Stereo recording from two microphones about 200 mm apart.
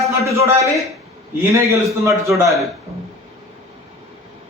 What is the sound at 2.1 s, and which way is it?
Speech, 15° right (ahead or behind).